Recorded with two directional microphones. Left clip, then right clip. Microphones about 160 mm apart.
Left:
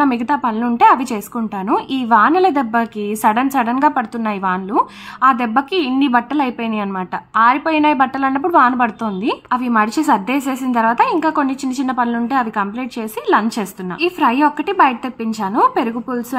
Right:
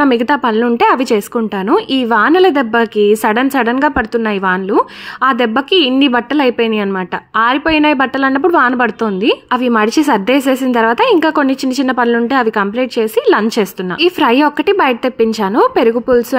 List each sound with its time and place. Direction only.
0.0 s a woman's voice: 35° right (ahead or behind)